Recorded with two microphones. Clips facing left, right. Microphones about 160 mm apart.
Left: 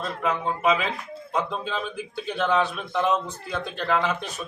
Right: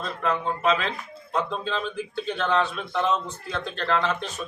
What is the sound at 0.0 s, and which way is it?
Speech, 5° left (ahead or behind).